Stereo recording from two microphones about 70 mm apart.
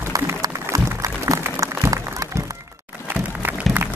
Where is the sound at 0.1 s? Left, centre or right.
Right.